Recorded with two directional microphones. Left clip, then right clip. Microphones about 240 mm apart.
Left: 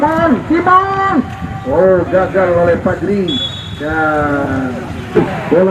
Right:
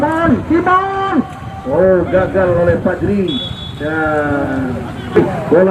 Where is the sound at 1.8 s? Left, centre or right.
Left.